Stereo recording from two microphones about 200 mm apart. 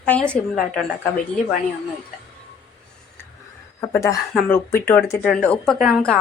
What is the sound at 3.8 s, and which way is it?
Speech, 15° left (ahead or behind).